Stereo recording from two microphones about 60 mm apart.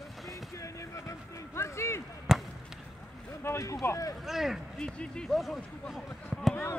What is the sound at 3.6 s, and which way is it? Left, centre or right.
Speech, left.